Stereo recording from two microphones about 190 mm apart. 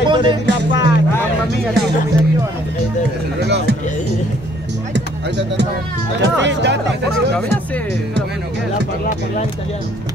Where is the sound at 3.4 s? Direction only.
60° right (ahead or behind).